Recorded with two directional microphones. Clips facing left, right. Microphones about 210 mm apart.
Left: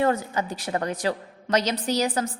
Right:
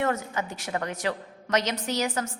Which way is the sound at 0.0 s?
35° left (ahead or behind).